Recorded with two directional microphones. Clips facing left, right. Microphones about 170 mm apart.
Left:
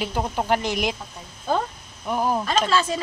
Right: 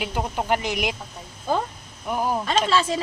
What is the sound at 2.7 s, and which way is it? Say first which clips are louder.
Speech: right 2 dB; 25° right (ahead or behind).